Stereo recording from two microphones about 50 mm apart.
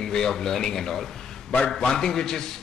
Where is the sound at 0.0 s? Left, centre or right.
Centre.